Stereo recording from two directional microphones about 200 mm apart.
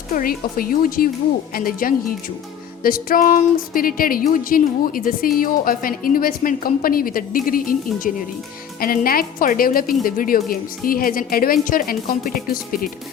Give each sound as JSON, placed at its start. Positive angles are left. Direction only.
{"t": 0.1, "sound": "speech", "side_deg": 45}
{"t": 8.8, "sound": "speech", "side_deg": 45}